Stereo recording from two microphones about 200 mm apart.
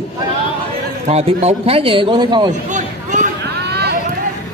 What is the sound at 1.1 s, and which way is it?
A man's voice, 30° right (ahead or behind).